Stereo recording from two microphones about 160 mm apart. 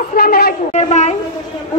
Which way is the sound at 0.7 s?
45° left (ahead or behind).